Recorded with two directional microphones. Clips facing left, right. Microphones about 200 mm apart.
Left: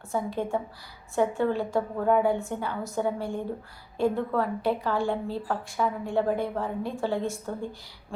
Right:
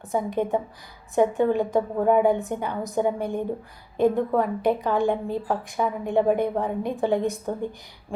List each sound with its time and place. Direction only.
0.1 s a woman's voice: 20° right (ahead or behind)